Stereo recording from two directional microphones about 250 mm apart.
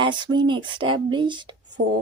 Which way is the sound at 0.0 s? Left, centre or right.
Centre.